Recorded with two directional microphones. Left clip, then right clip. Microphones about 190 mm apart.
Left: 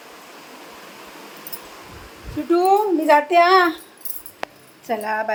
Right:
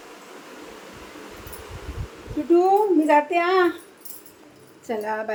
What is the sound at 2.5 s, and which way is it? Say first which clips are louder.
Speech: left 1 dB; 35° left (ahead or behind).